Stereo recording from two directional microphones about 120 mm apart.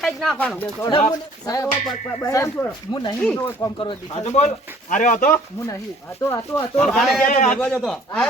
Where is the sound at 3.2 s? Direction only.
15° left (ahead or behind).